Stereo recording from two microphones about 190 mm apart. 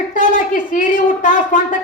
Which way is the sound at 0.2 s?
45° left (ahead or behind).